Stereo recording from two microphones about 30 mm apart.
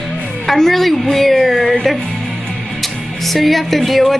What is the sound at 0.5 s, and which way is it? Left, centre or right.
A woman's voice, centre.